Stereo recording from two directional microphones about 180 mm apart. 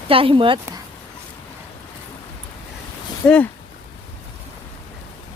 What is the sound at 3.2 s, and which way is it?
Speech, 5° left (ahead or behind).